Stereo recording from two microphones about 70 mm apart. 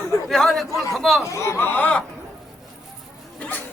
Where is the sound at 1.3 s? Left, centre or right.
Left.